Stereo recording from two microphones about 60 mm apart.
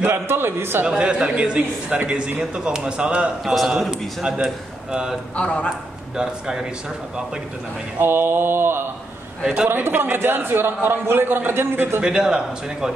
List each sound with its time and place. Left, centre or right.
0.1 s a man's voice: right
0.8 s a man's voice: centre
3.4 s a man's voice: centre
5.3 s a man's voice: centre
6.1 s a man's voice: centre
8.0 s a man's voice: right
12.0 s a man's voice: centre